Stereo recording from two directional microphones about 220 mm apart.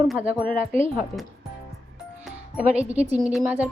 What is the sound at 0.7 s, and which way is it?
Speech, 25° right (ahead or behind).